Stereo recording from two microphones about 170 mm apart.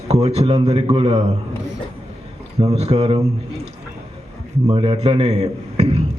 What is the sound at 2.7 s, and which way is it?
Speech, 35° right (ahead or behind).